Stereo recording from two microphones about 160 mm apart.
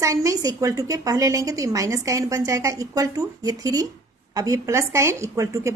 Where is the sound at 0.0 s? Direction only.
20° right (ahead or behind).